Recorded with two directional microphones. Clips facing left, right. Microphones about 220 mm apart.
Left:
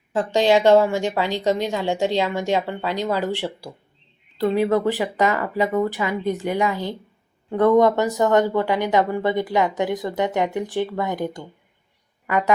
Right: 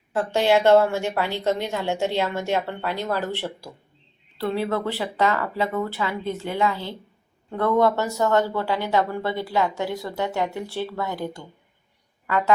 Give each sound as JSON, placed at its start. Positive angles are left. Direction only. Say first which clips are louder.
{"t": 0.1, "sound": "speech", "louder": "left 2 dB", "side_deg": 15}